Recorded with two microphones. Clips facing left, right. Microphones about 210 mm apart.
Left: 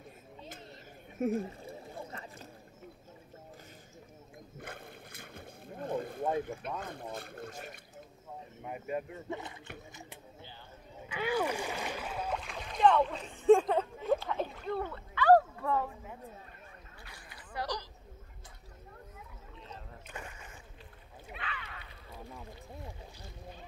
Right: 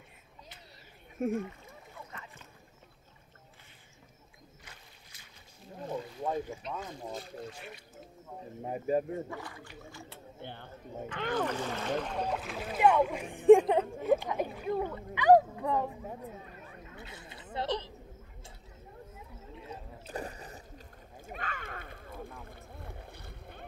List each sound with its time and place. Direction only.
1.3 s a sound: 35° left (ahead or behind)
4.6 s boat: 55° left (ahead or behind)
6.8 s speech: 60° left (ahead or behind)
8.6 s speech: 35° right (ahead or behind)
9.3 s speech: 20° left (ahead or behind)
10.4 s a sound: 60° right (ahead or behind)
11.1 s speech: 10° left (ahead or behind)
12.4 s speech: 5° right (ahead or behind)
16.9 s a sound: 20° right (ahead or behind)
20.1 s boat: 35° right (ahead or behind)
21.3 s a sound: 45° right (ahead or behind)
22.4 s boat: 55° right (ahead or behind)